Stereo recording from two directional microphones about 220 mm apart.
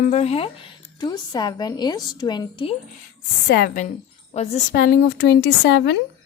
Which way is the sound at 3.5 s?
40° left (ahead or behind).